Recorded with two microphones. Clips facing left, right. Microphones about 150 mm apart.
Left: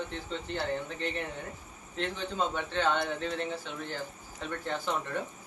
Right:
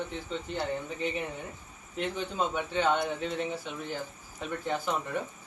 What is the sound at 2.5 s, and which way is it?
Speech, 10° right (ahead or behind).